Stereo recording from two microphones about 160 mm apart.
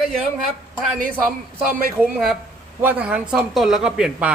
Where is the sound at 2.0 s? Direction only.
Centre (ahead or behind).